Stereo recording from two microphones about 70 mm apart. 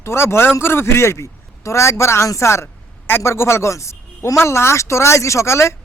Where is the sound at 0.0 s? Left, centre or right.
Left.